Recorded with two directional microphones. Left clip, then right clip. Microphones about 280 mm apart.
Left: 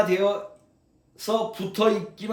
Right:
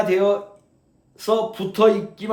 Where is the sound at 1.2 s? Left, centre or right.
Centre.